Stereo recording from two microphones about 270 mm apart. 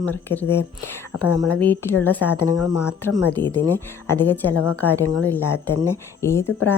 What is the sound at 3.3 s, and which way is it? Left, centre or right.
A woman's voice, centre.